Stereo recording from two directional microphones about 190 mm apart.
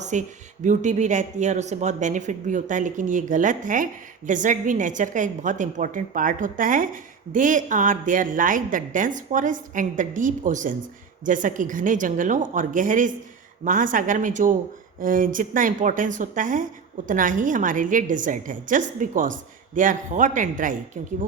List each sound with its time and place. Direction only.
0.0 s a woman's voice: 40° right (ahead or behind)